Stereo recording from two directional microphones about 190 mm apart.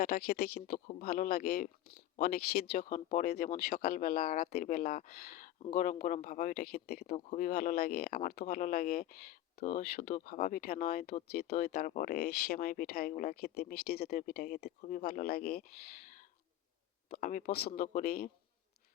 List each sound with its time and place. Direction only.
0.0 s speech: 50° left (ahead or behind)
17.2 s speech: 45° left (ahead or behind)